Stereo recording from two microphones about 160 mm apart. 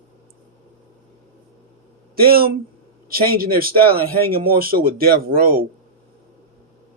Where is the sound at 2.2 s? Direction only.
70° right (ahead or behind).